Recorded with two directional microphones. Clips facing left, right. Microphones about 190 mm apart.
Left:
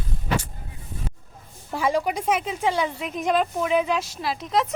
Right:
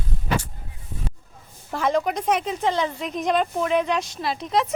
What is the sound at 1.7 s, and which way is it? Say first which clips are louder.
A woman's voice: right 1 dB; 10° left (ahead or behind).